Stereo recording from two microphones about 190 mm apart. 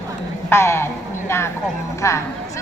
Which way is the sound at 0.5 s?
15° left (ahead or behind).